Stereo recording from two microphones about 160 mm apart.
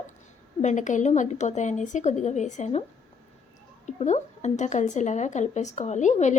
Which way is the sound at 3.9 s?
45° left (ahead or behind).